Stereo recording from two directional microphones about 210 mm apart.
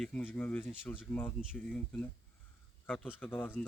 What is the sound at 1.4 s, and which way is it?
Speech, 5° right (ahead or behind).